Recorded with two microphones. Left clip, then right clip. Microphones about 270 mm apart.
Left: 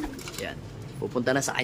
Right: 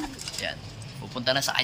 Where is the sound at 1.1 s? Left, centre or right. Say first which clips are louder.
Right 1 dB; centre.